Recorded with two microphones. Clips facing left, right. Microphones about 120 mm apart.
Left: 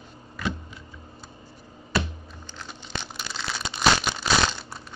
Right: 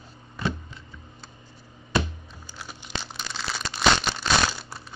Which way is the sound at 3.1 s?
Centre (ahead or behind).